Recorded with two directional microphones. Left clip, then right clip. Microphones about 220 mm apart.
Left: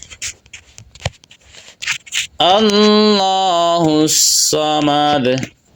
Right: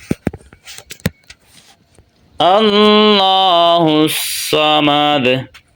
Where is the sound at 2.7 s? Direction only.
10° left (ahead or behind).